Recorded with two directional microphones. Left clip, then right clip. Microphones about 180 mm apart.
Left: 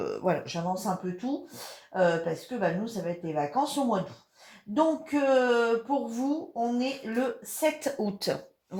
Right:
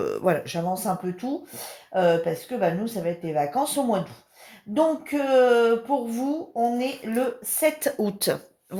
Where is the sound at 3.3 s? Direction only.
45° right (ahead or behind).